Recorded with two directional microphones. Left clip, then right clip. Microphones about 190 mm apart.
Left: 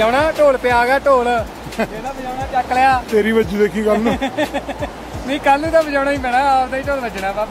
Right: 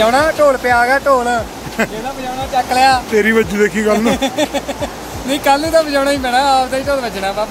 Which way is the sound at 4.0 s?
Centre (ahead or behind).